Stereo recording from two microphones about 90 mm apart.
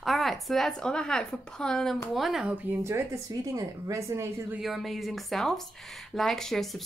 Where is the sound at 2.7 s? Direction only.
20° right (ahead or behind).